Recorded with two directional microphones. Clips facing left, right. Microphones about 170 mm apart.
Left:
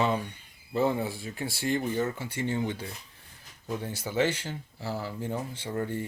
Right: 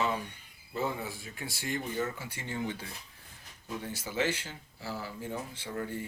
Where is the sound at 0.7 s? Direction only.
30° left (ahead or behind).